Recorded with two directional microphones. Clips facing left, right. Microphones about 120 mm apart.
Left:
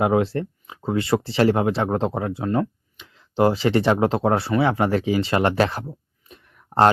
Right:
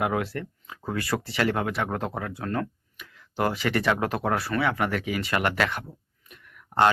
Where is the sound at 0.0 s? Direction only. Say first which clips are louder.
Left 7 dB; 30° left (ahead or behind).